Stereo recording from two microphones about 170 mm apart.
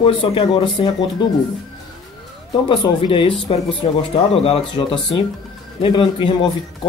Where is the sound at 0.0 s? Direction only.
30° left (ahead or behind).